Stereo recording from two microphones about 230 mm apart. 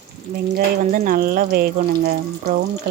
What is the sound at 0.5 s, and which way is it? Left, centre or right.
Speech, right.